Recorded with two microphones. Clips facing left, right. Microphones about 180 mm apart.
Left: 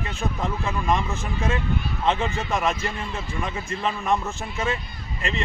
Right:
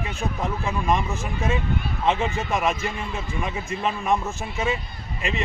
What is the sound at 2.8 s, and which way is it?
Speech, 15° right (ahead or behind).